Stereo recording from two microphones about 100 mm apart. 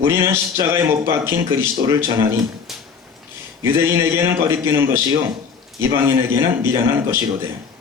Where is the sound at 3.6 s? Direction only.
25° right (ahead or behind).